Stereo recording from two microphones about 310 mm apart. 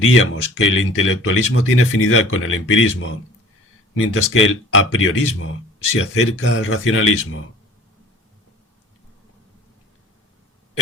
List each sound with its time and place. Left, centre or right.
0.0 s speech: left